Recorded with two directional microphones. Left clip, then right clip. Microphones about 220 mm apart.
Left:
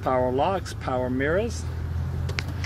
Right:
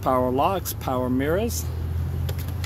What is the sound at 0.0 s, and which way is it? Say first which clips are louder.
Speech: right 2 dB; 30° right (ahead or behind).